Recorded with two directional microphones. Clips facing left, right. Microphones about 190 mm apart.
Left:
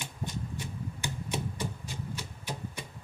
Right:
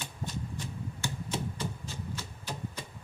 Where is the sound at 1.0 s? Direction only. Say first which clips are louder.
Even; 15° left (ahead or behind).